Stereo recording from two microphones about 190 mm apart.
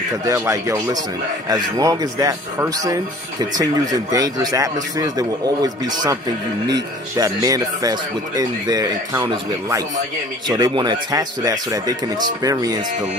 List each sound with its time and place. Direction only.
0.2 s speech: 15° right (ahead or behind)